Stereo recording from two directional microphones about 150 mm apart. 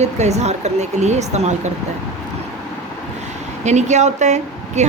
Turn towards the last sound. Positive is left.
turn(degrees=-50)  # may be behind; listen again after turning